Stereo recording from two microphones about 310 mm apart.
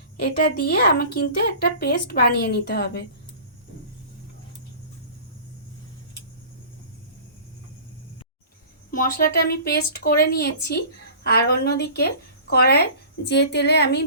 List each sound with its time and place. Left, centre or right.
0.2 s a woman's voice: left
8.9 s speech: left